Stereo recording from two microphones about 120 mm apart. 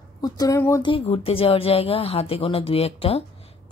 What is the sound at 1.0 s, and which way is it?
Speech, 55° left (ahead or behind).